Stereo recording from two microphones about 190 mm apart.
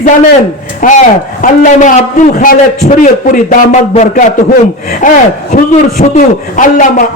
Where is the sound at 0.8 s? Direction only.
45° left (ahead or behind).